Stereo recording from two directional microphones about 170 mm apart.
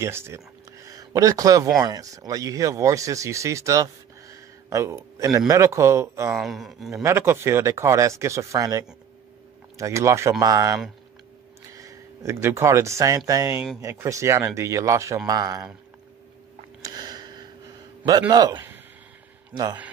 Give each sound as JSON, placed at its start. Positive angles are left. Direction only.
{"t": 0.0, "sound": "speech", "side_deg": -15}
{"t": 6.3, "sound": "speech", "side_deg": 0}
{"t": 6.9, "sound": "speech", "side_deg": -15}
{"t": 16.8, "sound": "a sound", "side_deg": -25}
{"t": 18.3, "sound": "speech", "side_deg": -25}